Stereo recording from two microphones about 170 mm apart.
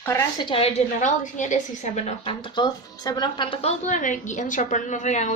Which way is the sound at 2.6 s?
25° left (ahead or behind).